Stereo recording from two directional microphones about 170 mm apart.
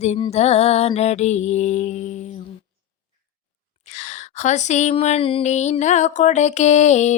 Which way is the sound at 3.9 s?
45° left (ahead or behind).